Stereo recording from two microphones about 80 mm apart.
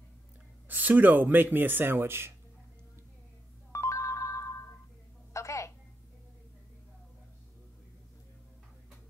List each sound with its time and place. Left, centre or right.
0.7 s speech: right
3.7 s ringtone: left
5.3 s telephone: left